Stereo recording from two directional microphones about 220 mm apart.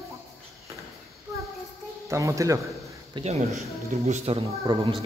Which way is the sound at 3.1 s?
30° right (ahead or behind).